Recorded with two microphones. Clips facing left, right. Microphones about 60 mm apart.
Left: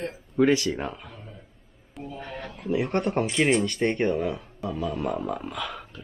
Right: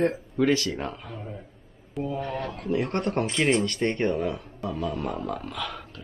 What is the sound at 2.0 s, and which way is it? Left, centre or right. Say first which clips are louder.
Speech: right 7 dB; centre.